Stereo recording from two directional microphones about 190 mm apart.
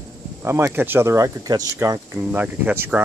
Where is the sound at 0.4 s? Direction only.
15° right (ahead or behind).